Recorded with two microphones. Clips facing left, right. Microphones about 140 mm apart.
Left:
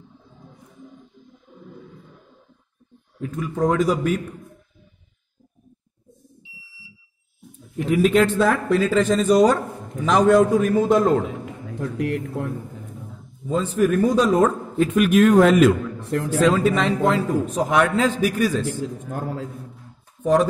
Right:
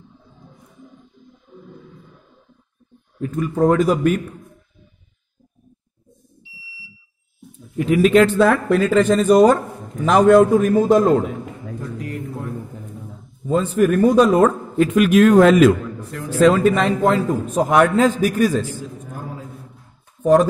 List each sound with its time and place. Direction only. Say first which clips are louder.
3.3 s a man's voice: right 4 dB; 55° right (ahead or behind)
7.7 s a man's voice: right 4 dB; 90° right; by 11.1 s 45° right (ahead or behind)
11.8 s speech: left 6 dB; 70° left (ahead or behind)
13.5 s a man's voice: right 3 dB; 60° right (ahead or behind); by 15.7 s 90° right
16.1 s speech: left 6 dB; 65° left (ahead or behind)
16.3 s a man's voice: right 5 dB; 65° right (ahead or behind); by 18.7 s 45° right (ahead or behind)
19.1 s a man's voice: left 5 dB; 80° left